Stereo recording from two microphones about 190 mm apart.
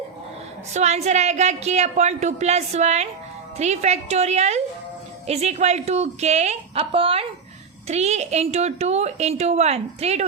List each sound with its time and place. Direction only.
0.7 s a woman's voice: 35° right (ahead or behind)